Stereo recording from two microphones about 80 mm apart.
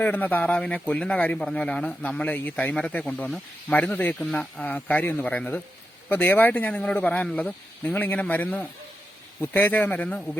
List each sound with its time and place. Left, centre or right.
0.0 s a man's voice: left